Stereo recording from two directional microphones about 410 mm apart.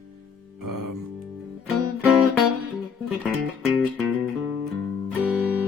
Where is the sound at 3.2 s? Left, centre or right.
Centre.